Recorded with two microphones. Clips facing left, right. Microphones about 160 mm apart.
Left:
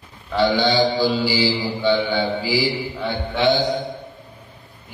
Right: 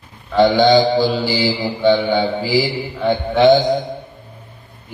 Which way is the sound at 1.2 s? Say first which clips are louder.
Right 2 dB; 45° right (ahead or behind).